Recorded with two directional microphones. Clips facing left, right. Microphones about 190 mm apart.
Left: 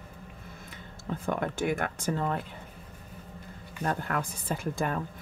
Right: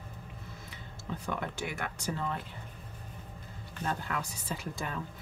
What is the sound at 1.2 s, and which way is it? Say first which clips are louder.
Speech: left 7 dB; 50° left (ahead or behind).